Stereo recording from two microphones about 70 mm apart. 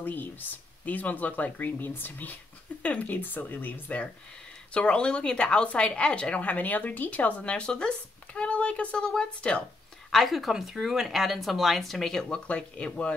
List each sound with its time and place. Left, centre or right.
0.0 s speech: left
10.1 s speech: centre